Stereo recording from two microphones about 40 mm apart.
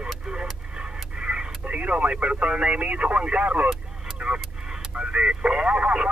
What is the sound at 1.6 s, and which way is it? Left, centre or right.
Speech, right.